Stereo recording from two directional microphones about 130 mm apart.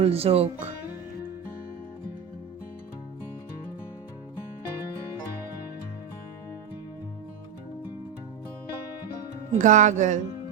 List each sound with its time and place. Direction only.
0.0 s speech: 50° right (ahead or behind)
9.6 s speech: 70° right (ahead or behind)